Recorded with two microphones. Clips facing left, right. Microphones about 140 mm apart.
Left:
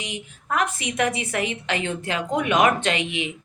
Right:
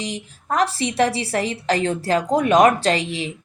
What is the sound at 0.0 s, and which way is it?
A woman's voice, 35° right (ahead or behind).